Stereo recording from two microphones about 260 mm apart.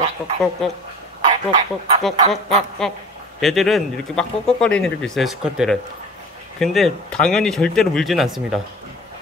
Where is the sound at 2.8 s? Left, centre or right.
Centre.